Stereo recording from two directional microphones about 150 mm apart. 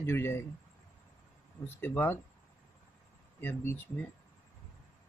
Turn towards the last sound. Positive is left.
turn(degrees=15)  # may be behind; listen again after turning